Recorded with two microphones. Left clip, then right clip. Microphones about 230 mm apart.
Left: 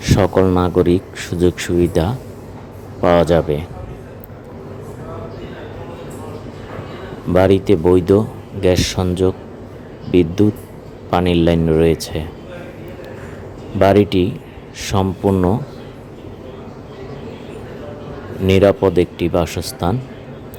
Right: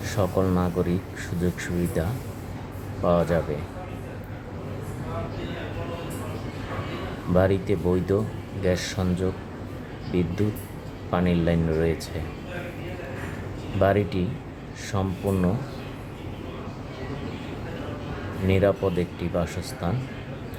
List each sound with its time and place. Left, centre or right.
0.0 s speech: left
7.3 s speech: left
10.4 s speech: left
13.7 s speech: left
18.4 s speech: left